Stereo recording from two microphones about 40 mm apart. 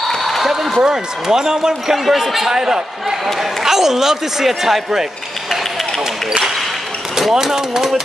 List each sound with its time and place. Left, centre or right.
0.2 s a sound: centre
0.8 s speech: centre
2.0 s speech: centre
7.2 s speech: centre